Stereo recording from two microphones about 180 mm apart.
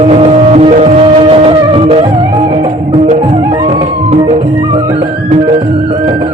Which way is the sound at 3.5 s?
25° right (ahead or behind).